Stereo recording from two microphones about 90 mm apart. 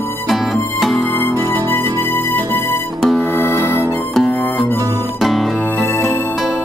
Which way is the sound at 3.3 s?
25° left (ahead or behind).